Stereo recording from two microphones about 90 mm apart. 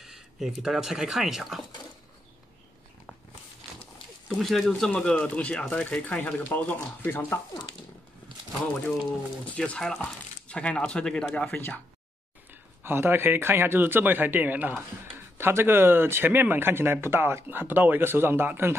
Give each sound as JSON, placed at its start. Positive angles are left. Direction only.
{"t": 0.0, "sound": "speech", "side_deg": -5}
{"t": 4.3, "sound": "speech", "side_deg": 0}
{"t": 9.6, "sound": "speech", "side_deg": 10}
{"t": 12.8, "sound": "speech", "side_deg": -25}